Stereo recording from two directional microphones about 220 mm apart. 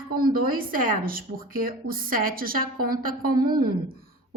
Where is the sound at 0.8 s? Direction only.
40° right (ahead or behind).